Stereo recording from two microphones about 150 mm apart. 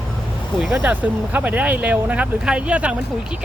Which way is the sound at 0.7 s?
10° right (ahead or behind).